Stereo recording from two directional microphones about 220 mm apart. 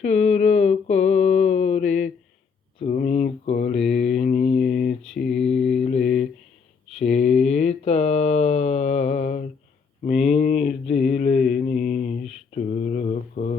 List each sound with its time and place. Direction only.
0.0 s mantra: 30° left (ahead or behind)
5.1 s mantra: centre (ahead or behind)
5.7 s mantra: 30° left (ahead or behind)
7.0 s mantra: 30° left (ahead or behind)
10.3 s a sound: 30° left (ahead or behind)
10.9 s mantra: 35° left (ahead or behind)